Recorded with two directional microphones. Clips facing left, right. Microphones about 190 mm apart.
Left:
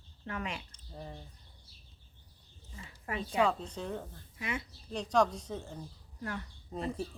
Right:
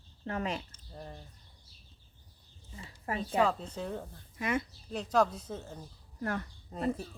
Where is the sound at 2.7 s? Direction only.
30° right (ahead or behind).